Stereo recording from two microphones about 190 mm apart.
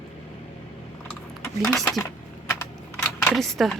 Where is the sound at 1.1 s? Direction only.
5° left (ahead or behind).